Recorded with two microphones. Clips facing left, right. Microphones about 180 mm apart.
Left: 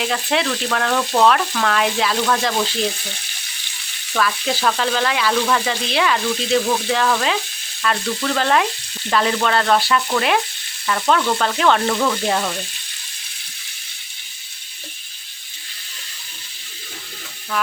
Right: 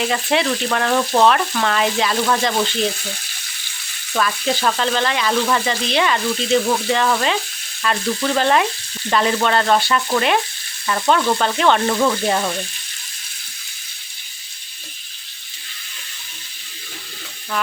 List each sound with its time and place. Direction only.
0.0 s speech: centre (ahead or behind)
0.9 s frying: 15° right (ahead or behind)
1.3 s speech: centre (ahead or behind)
4.2 s speech: centre (ahead or behind)
10.8 s frying: 5° right (ahead or behind)
11.5 s speech: centre (ahead or behind)